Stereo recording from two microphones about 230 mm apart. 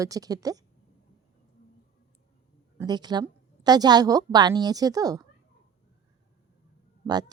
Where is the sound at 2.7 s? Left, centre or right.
Centre.